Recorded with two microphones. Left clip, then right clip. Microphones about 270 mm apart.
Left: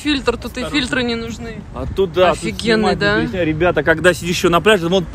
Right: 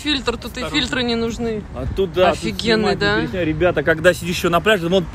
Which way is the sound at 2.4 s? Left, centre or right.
Centre.